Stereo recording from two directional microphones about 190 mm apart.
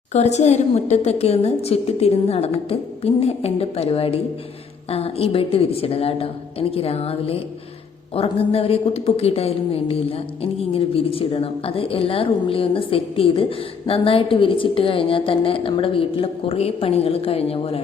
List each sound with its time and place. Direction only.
0.1 s a woman's voice: 35° left (ahead or behind)